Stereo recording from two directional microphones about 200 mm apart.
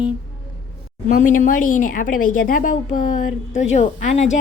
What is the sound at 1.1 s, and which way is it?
Speech, 40° left (ahead or behind).